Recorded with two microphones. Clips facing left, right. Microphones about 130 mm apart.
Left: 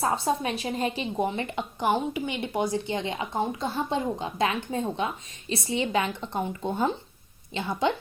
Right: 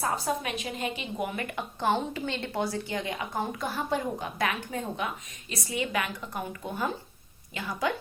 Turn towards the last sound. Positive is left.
turn(degrees=25)  # may be behind; listen again after turning